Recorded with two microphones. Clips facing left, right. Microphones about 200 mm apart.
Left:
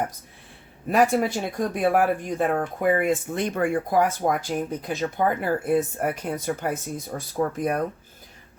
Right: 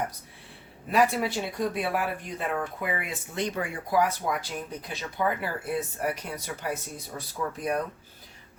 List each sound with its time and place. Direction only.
0.9 s speech: 45° left (ahead or behind)